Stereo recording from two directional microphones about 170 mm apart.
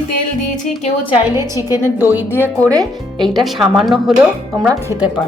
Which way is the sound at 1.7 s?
10° right (ahead or behind).